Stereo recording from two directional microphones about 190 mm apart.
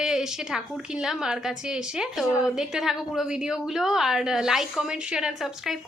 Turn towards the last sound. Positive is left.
turn(degrees=-5)  # may be behind; listen again after turning